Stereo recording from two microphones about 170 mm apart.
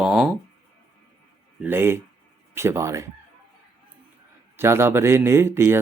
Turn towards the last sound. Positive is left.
turn(degrees=-15)  # may be behind; listen again after turning